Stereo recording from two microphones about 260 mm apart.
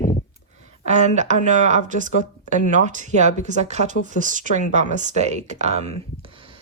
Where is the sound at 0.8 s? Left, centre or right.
Right.